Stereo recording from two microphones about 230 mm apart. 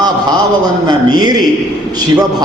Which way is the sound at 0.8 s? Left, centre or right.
Centre.